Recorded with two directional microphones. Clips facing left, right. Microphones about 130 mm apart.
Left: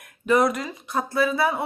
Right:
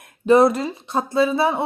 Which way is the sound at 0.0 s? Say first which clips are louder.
Right 6 dB; 30° right (ahead or behind).